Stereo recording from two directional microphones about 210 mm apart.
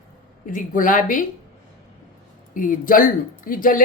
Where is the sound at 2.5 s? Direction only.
40° left (ahead or behind).